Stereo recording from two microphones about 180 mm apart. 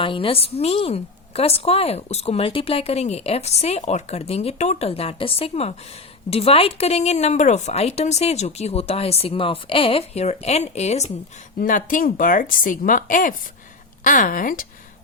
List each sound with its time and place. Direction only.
0.0 s a woman's voice: 30° left (ahead or behind); by 14.7 s 50° left (ahead or behind)